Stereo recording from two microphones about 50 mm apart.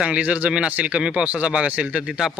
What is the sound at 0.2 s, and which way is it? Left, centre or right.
A man's voice, right.